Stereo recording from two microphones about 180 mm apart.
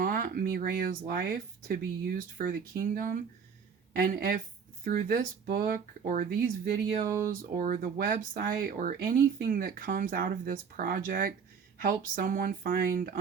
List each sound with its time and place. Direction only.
0.0 s a woman's voice: 50° right (ahead or behind)
7.5 s speech: 50° right (ahead or behind)